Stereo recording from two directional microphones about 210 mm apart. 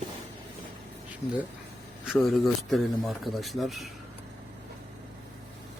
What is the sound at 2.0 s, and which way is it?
Speech, centre (ahead or behind).